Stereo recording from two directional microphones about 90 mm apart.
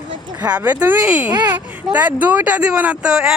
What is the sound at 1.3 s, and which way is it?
Speech, 50° right (ahead or behind).